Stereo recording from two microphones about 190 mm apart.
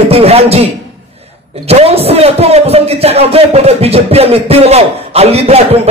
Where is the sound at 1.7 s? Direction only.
30° right (ahead or behind).